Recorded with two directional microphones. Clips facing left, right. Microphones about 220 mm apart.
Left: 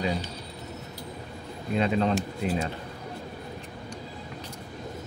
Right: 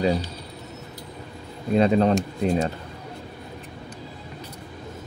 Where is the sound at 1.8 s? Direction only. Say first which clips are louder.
Right 6 dB; 45° right (ahead or behind).